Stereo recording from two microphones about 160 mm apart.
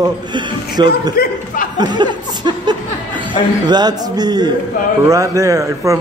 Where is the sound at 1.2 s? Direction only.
75° left (ahead or behind).